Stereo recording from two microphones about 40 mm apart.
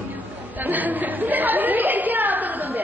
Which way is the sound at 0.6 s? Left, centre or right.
Right.